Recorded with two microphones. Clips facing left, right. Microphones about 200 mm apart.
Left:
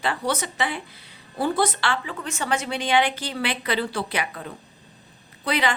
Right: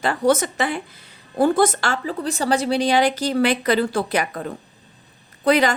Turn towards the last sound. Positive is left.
turn(degrees=-45)  # may be behind; listen again after turning